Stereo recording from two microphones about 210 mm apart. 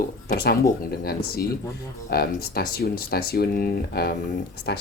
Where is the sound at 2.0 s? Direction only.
45° left (ahead or behind).